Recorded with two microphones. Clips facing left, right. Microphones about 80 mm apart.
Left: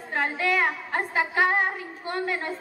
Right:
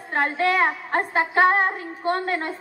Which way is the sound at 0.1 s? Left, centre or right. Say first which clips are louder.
Right 4 dB; right.